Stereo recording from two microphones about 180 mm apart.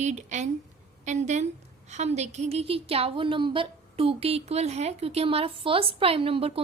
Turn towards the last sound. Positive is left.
turn(degrees=-30)  # may be behind; listen again after turning